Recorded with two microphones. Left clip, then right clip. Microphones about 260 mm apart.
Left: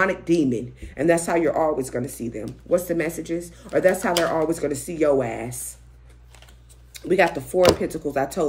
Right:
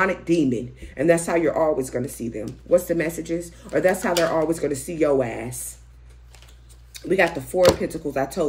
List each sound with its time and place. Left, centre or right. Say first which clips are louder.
0.0 s speech: even; centre
6.9 s speech: left 1 dB; centre